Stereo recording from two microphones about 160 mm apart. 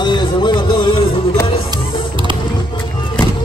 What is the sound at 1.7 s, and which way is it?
Music, 30° right (ahead or behind).